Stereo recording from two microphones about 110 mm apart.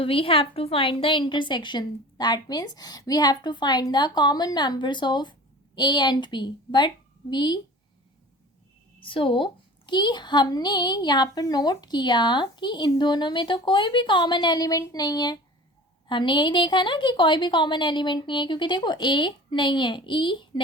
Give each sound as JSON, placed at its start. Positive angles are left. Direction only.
{"t": 0.0, "sound": "a woman's voice", "side_deg": 55}
{"t": 9.0, "sound": "a woman's voice", "side_deg": 50}